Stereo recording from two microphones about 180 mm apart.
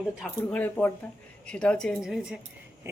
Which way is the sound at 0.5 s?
10° left (ahead or behind).